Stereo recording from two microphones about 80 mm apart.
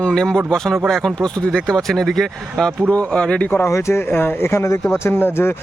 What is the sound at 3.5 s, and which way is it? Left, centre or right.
Speech, left.